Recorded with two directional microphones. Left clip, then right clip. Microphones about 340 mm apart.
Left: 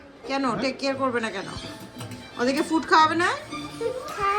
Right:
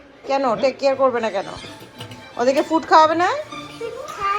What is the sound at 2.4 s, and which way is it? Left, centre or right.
Speech, centre.